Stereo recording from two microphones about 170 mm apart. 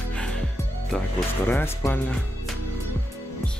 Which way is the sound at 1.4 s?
15° left (ahead or behind).